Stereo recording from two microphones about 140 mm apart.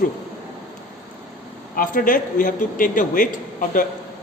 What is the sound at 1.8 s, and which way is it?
A man's voice, 80° left.